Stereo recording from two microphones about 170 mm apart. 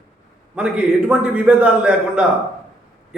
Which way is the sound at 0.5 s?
5° right (ahead or behind).